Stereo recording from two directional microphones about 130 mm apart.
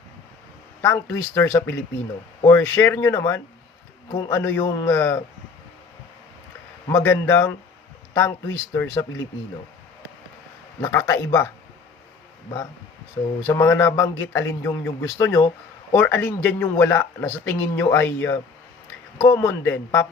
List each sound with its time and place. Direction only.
0.8 s a man's voice: 20° left (ahead or behind)
6.8 s a man's voice: 20° left (ahead or behind)
10.8 s a man's voice: 20° left (ahead or behind)
13.4 s a man's voice: 20° left (ahead or behind)